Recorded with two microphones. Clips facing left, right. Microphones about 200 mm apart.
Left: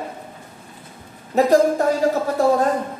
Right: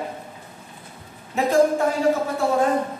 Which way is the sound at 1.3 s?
40° left (ahead or behind).